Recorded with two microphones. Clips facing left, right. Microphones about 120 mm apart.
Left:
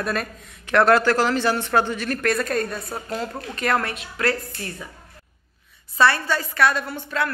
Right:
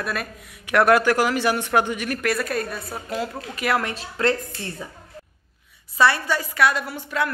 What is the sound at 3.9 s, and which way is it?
Speech, 30° right (ahead or behind).